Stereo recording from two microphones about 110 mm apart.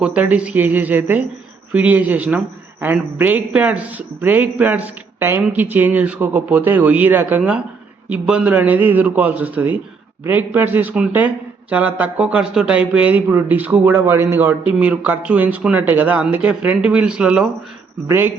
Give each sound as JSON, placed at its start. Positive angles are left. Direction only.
{"t": 0.0, "sound": "speech", "side_deg": -10}